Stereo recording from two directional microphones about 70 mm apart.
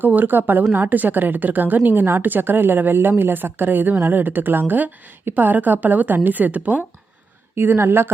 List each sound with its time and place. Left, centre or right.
0.0 s a woman's voice: right
7.5 s a woman's voice: right